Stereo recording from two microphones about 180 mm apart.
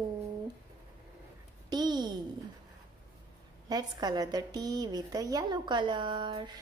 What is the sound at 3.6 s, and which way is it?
A woman's voice, 20° right (ahead or behind).